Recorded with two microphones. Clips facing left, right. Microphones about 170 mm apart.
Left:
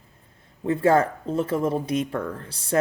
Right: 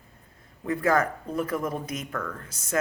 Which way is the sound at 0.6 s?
30° left (ahead or behind).